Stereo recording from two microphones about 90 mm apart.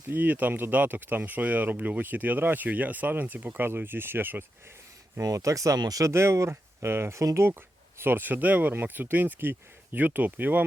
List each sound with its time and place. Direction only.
0.1 s speech: 20° right (ahead or behind)
5.2 s speech: 40° right (ahead or behind); by 10.6 s 20° right (ahead or behind)